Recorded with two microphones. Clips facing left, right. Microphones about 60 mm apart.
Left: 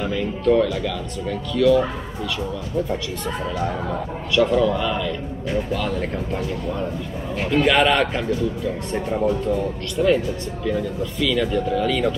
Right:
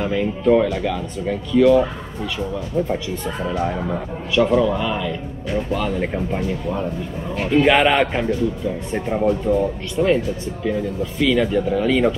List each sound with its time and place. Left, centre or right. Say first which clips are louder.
0.0 s speech: right 2 dB; centre
3.4 s speech: right 4 dB; centre